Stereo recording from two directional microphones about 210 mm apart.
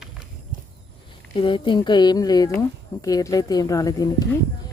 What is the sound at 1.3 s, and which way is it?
Speech, 25° left (ahead or behind).